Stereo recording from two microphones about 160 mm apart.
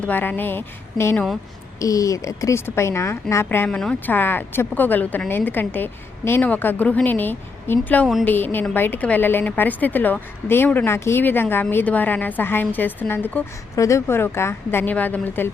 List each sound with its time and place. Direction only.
0.0 s a woman's voice: 10° left (ahead or behind)